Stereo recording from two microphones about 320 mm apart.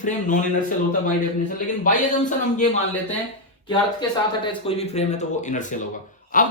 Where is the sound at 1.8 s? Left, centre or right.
Left.